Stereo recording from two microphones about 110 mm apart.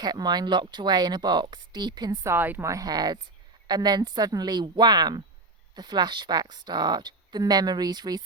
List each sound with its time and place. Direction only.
0.0 s a woman's voice: 40° right (ahead or behind)
2.2 s a woman's voice: 20° right (ahead or behind)
2.6 s a woman's voice: 35° right (ahead or behind)